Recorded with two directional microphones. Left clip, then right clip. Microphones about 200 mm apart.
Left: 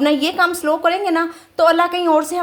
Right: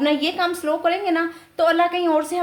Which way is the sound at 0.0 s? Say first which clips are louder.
Left 4 dB; 30° left (ahead or behind).